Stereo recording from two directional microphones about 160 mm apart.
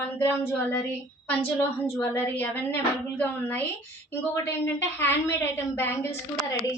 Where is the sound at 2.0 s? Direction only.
10° left (ahead or behind).